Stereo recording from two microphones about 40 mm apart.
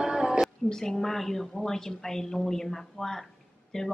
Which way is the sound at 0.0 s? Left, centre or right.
Centre.